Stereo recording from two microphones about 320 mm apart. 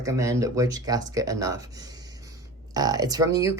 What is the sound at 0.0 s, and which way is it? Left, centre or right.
Speech, centre.